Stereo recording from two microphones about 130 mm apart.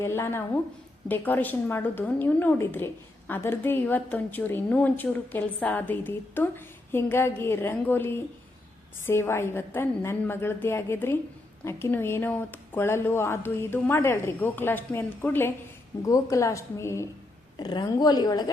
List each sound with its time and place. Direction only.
0.0 s a woman's voice: 20° left (ahead or behind)
17.6 s a woman's voice: 35° left (ahead or behind)